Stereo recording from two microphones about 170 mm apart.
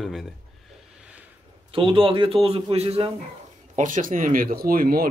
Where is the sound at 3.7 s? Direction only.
50° right (ahead or behind).